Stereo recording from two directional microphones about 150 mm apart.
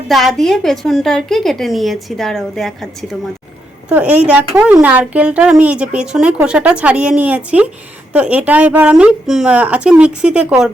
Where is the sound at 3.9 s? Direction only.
10° right (ahead or behind).